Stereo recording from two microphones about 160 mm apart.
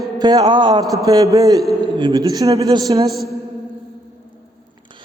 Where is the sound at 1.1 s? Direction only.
25° right (ahead or behind).